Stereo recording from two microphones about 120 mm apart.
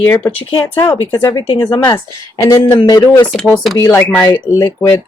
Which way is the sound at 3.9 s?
15° left (ahead or behind).